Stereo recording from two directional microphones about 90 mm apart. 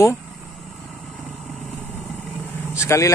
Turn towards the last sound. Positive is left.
turn(degrees=35)  # may be behind; listen again after turning